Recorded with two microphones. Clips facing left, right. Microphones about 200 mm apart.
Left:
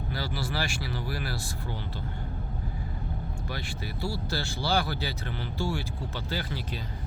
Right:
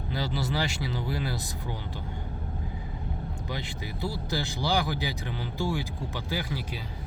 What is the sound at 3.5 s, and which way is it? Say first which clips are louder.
Speech: right 1 dB; 20° right (ahead or behind).